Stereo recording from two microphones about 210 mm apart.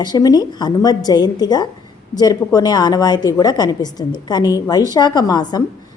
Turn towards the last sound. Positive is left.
turn(degrees=20)  # may be behind; listen again after turning